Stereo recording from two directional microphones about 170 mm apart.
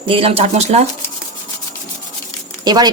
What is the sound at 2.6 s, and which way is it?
Speech, 25° right (ahead or behind).